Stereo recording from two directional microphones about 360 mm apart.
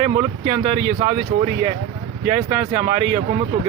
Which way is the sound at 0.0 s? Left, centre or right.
Centre.